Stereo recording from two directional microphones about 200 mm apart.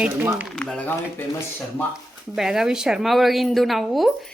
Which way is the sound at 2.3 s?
Centre (ahead or behind).